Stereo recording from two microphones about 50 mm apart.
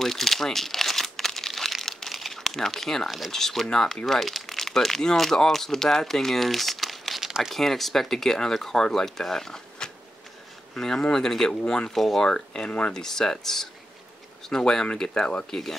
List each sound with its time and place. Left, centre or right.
0.0 s crumpling: centre
3.3 s speech: centre
7.2 s crumpling: centre
7.5 s speech: centre
11.6 s speech: centre
11.9 s speech: centre
12.3 s speech: centre
12.9 s speech: centre